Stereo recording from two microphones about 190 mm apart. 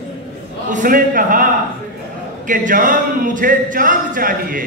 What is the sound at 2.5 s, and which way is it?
Speech, 45° right (ahead or behind).